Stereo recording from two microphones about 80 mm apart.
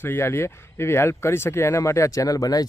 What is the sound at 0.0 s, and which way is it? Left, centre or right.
Speech, left.